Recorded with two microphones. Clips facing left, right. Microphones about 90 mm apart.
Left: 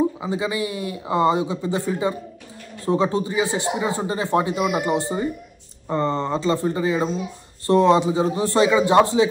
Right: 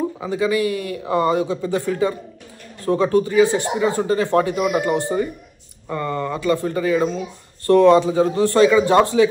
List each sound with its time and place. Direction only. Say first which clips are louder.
0.2 s speech: right 5 dB; 20° left (ahead or behind)